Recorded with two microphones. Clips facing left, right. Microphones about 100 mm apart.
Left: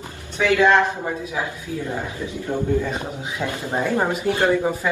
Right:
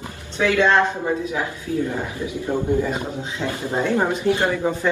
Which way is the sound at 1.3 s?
20° left (ahead or behind).